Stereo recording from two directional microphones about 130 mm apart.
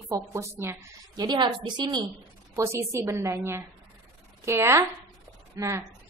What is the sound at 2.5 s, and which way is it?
A woman's voice, 25° right (ahead or behind).